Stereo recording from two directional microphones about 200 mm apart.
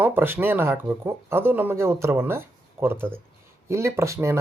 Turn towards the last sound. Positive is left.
turn(degrees=-15)  # may be behind; listen again after turning